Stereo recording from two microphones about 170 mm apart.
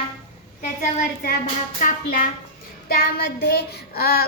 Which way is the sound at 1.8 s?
50° left (ahead or behind).